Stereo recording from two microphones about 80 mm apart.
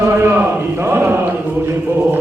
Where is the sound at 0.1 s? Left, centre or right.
Right.